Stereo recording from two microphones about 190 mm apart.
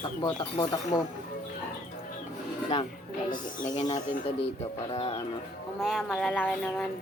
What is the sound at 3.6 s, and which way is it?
Speech, 40° left (ahead or behind).